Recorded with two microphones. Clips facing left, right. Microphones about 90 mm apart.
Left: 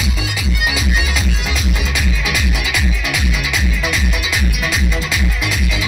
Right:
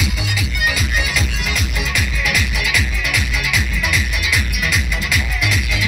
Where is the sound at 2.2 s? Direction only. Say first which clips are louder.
Even; 5° left (ahead or behind).